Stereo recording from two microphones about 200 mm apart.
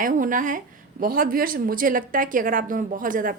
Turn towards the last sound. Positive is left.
turn(degrees=-40)  # may be behind; listen again after turning